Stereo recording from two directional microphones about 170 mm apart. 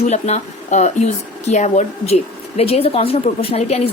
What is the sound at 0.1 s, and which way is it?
Speech, 45° left (ahead or behind).